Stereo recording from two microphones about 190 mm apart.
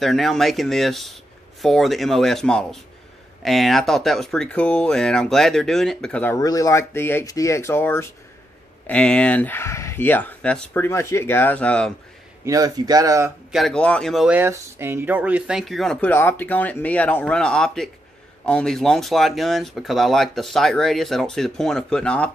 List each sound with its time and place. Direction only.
0.0 s speech: centre (ahead or behind)
12.4 s speech: 20° right (ahead or behind)
13.5 s speech: centre (ahead or behind)